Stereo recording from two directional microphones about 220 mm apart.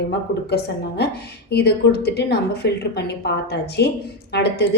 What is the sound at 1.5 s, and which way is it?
A woman's voice, 50° left (ahead or behind).